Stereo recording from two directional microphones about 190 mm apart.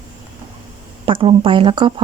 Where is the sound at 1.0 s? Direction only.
30° right (ahead or behind).